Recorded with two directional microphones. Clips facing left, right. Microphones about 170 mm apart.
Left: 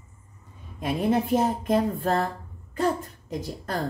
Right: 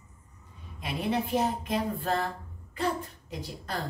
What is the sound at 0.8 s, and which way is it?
Speech, 45° left (ahead or behind).